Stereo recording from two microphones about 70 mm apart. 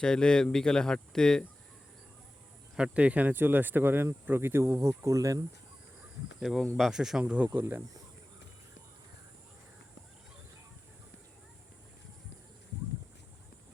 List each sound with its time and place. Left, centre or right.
0.0 s speech: centre
2.7 s speech: centre; by 5.5 s right
6.4 s speech: centre
7.6 s speech: right